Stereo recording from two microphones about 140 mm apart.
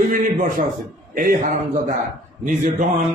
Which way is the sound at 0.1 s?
75° right (ahead or behind).